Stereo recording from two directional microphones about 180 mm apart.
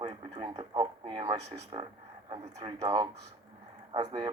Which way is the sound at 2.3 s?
25° right (ahead or behind).